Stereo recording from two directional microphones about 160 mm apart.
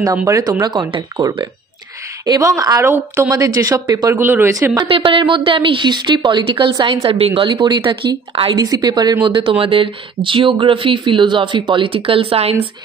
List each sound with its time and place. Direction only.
0.0 s a woman's voice: 20° right (ahead or behind)
4.8 s speech: 35° right (ahead or behind)